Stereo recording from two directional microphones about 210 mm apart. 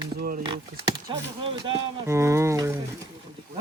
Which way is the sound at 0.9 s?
20° right (ahead or behind).